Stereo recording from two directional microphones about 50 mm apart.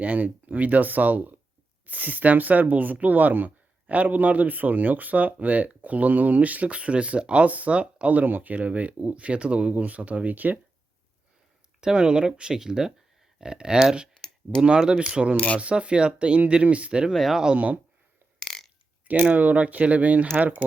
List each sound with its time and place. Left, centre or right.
0.0 s speech: right
11.8 s speech: centre
17.1 s speech: centre
17.4 s speech: right
18.5 s burping: centre
19.0 s speech: right